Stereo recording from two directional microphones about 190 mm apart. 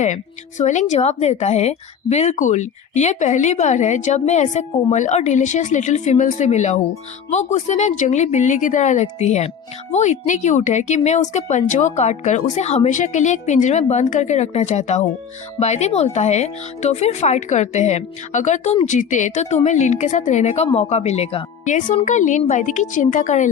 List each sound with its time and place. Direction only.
0.0 s speech: 40° left (ahead or behind)